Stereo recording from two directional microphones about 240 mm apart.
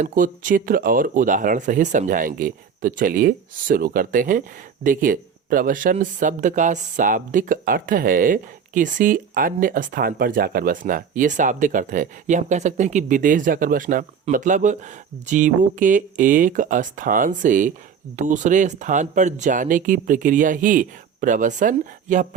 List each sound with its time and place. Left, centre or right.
0.0 s speech: right